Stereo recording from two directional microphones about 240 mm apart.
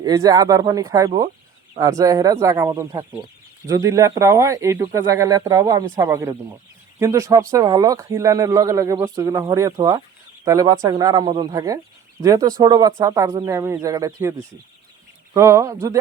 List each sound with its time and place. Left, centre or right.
0.0 s speech: centre